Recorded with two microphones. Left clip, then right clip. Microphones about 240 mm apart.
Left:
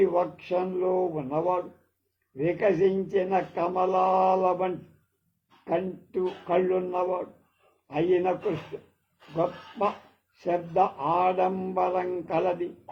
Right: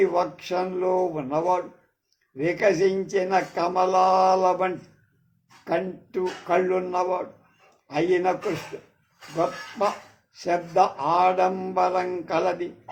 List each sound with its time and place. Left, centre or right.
0.0 s speech: right
7.9 s mantra: right
9.3 s speech: right
10.4 s mantra: right